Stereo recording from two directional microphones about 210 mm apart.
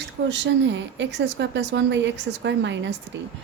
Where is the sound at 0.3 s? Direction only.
60° right (ahead or behind).